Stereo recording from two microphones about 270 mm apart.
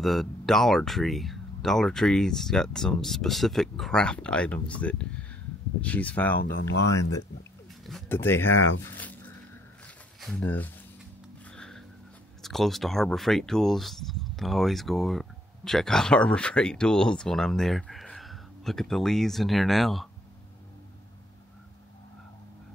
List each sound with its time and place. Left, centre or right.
0.0 s speech: centre
7.8 s speech: centre
8.5 s speech: left
8.8 s speech: centre
11.5 s a sound: centre
12.4 s speech: centre